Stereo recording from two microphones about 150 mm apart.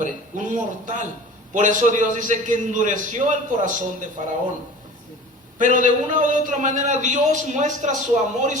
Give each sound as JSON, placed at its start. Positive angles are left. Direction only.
{"t": 0.0, "sound": "a man's voice", "side_deg": -55}
{"t": 5.7, "sound": "a man's voice", "side_deg": -60}